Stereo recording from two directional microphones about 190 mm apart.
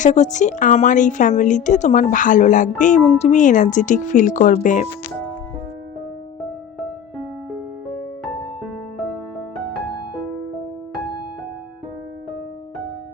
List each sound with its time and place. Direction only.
0.0 s a woman's voice: 40° left (ahead or behind)